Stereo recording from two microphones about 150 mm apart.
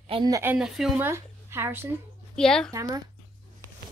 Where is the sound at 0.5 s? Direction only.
5° right (ahead or behind).